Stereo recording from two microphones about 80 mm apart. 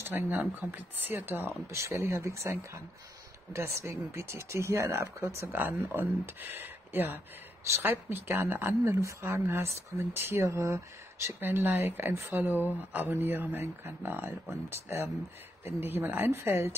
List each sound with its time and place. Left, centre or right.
0.0 s speech: right
11.3 s speech: right